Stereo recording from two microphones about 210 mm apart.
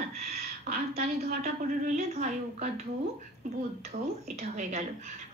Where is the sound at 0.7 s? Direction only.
35° right (ahead or behind).